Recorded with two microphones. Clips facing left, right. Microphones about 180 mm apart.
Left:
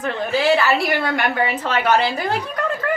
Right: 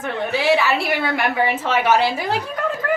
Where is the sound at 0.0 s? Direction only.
Centre (ahead or behind).